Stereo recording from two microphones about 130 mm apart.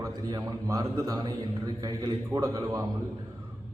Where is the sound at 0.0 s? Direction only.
25° right (ahead or behind).